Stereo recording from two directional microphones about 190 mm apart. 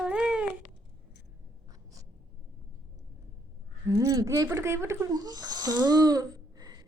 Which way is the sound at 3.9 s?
15° right (ahead or behind).